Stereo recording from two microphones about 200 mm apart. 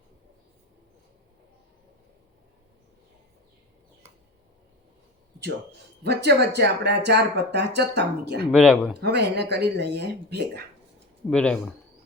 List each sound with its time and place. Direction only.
5.4 s speech: 55° right (ahead or behind)
8.5 s speech: 5° left (ahead or behind)
9.0 s speech: 55° right (ahead or behind)
11.3 s speech: 5° left (ahead or behind)